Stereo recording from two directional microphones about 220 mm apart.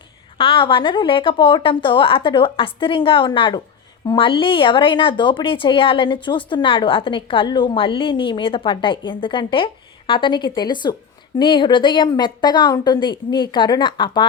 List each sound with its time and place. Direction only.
0.3 s speech: 25° left (ahead or behind)